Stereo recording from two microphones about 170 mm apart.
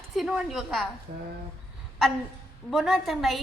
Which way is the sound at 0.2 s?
Centre (ahead or behind).